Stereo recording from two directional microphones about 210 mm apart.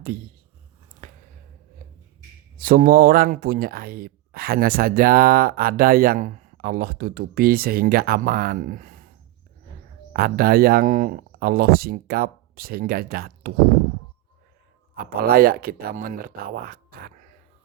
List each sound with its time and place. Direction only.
1.0 s a sound: 45° right (ahead or behind)
2.6 s speech: 40° right (ahead or behind)
10.1 s speech: 45° right (ahead or behind)
14.9 s speech: 45° right (ahead or behind)